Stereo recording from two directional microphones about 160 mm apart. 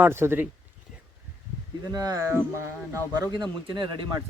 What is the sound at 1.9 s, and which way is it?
Speech, 20° right (ahead or behind).